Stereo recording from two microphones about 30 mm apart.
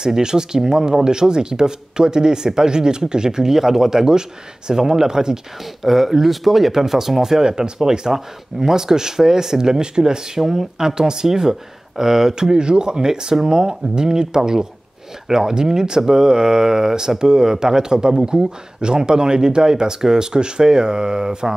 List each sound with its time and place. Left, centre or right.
0.0 s speech: right
5.8 s speech: centre; by 21.5 s right